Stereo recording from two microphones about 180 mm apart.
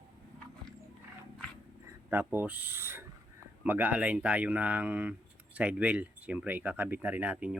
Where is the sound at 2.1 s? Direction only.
10° right (ahead or behind).